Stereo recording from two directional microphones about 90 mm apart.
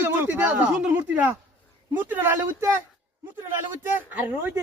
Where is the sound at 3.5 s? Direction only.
20° right (ahead or behind).